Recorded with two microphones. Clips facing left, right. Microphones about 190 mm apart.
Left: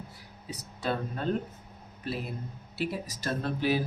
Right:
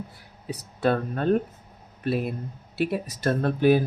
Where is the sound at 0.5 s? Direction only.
60° right (ahead or behind).